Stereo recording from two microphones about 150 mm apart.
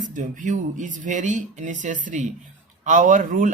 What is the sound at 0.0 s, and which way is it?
Speech, 60° right (ahead or behind).